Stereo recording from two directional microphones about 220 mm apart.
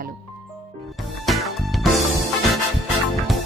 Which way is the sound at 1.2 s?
Centre (ahead or behind).